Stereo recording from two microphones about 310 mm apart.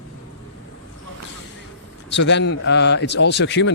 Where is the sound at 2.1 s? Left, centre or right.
Left.